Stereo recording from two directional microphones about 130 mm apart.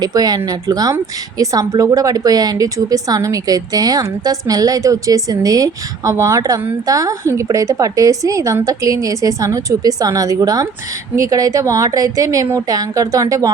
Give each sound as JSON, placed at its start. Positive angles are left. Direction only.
{"t": 0.0, "sound": "a woman's voice", "side_deg": -30}